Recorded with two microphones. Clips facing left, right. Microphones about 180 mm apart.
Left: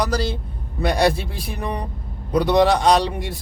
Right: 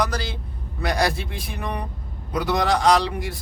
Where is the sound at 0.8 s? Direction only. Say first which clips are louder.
Left 5 dB; 25° left (ahead or behind).